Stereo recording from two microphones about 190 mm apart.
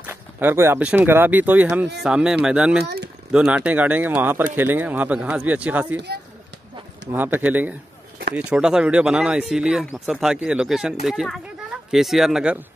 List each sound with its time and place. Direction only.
0.0 s speech: 10° right (ahead or behind)
2.8 s speech: 60° right (ahead or behind)
3.3 s speech: 5° right (ahead or behind)
5.9 s speech: 60° right (ahead or behind)
7.1 s speech: 10° right (ahead or behind)